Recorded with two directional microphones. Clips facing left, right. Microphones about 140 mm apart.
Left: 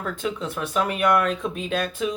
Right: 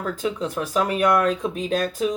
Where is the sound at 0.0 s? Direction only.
40° right (ahead or behind).